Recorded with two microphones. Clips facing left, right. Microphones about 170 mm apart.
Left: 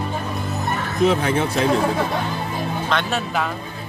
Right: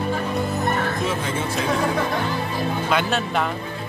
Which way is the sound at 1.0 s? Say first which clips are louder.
Left 6 dB; 65° left (ahead or behind).